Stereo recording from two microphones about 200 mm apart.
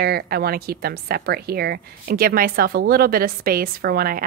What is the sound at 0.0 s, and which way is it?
A woman's voice, 50° right (ahead or behind).